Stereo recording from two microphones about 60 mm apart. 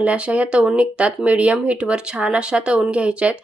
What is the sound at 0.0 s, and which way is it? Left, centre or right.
Speech, right.